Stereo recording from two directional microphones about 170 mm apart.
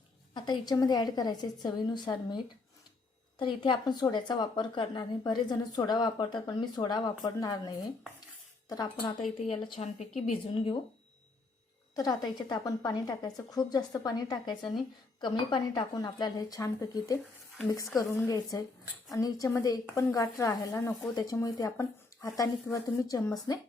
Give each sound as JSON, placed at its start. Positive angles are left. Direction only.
{"t": 0.3, "sound": "speech", "side_deg": 25}
{"t": 9.4, "sound": "a woman's voice", "side_deg": 35}
{"t": 10.5, "sound": "speech", "side_deg": 30}
{"t": 11.9, "sound": "speech", "side_deg": 20}